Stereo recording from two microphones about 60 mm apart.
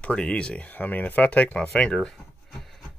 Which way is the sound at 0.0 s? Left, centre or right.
Centre.